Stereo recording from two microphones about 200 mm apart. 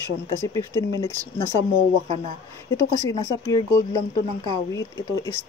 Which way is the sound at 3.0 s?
20° left (ahead or behind).